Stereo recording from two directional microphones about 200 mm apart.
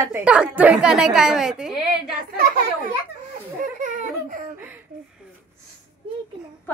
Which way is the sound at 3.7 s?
40° right (ahead or behind).